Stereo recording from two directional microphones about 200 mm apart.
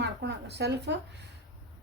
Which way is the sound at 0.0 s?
60° right (ahead or behind).